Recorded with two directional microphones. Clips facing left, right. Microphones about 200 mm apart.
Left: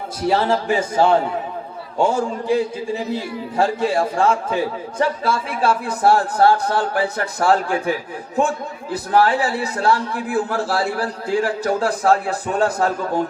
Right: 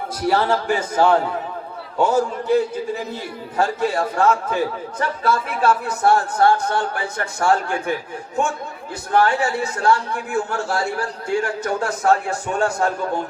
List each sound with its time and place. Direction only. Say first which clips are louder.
0.3 s a man's voice: left 1 dB; 25° left (ahead or behind)
3.6 s a man's voice: left 2 dB; 30° left (ahead or behind)